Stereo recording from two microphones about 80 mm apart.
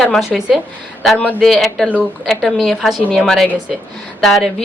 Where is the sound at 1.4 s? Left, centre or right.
Centre.